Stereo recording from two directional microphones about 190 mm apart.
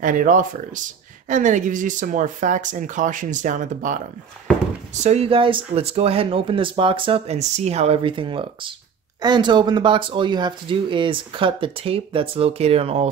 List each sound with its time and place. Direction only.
0.0 s speech: 45° right (ahead or behind)